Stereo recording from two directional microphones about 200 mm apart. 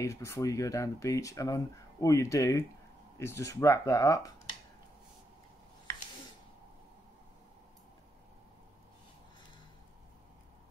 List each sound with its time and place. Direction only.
0.0 s speech: 15° left (ahead or behind)